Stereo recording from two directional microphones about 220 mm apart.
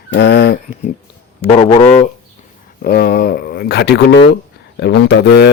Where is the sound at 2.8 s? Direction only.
45° left (ahead or behind).